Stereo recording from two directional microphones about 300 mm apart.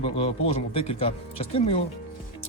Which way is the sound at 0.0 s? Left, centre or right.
Centre.